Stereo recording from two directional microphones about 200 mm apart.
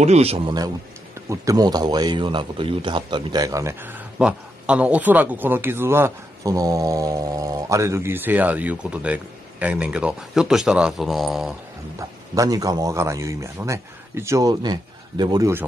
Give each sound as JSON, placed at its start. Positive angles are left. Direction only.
{"t": 0.0, "sound": "a man's voice", "side_deg": -30}
{"t": 1.3, "sound": "speech", "side_deg": -15}
{"t": 12.0, "sound": "speech", "side_deg": -15}